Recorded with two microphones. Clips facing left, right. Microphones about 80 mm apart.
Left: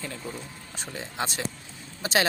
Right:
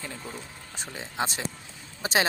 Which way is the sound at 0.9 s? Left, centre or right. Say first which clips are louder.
Right 1 dB; right.